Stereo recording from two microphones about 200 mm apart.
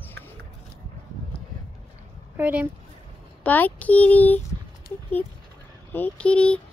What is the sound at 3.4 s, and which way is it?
Speech, 10° left (ahead or behind).